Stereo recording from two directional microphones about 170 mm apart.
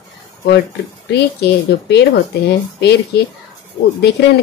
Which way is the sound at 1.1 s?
80° left.